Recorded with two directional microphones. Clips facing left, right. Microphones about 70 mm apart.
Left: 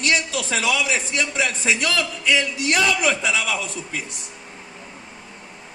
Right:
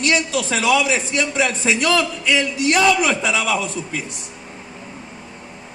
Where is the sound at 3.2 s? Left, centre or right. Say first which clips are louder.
Right 3 dB; right.